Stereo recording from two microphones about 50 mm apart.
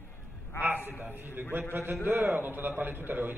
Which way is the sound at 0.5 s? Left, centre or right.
Left.